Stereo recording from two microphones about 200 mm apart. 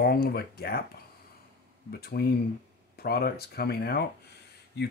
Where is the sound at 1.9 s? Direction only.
50° left (ahead or behind).